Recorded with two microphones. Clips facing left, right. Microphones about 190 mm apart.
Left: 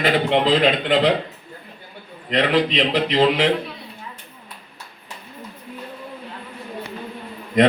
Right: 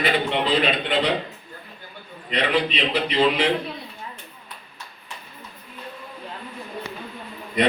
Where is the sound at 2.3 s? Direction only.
90° left.